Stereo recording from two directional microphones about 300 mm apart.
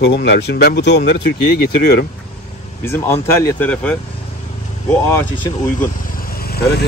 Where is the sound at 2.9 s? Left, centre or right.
Centre.